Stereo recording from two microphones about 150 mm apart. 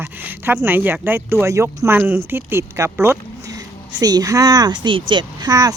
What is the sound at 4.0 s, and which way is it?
Speech, 25° right (ahead or behind).